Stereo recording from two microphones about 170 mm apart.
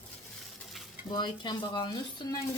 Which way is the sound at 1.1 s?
25° left (ahead or behind).